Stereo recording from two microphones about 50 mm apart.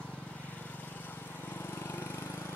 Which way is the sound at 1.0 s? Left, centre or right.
Left.